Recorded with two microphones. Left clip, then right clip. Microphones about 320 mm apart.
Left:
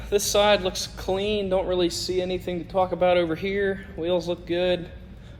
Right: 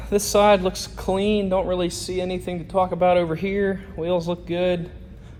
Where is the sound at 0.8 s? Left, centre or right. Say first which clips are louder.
Right 3 dB; centre.